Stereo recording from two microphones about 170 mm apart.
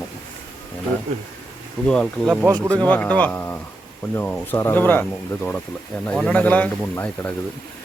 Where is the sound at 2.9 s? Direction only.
10° left (ahead or behind).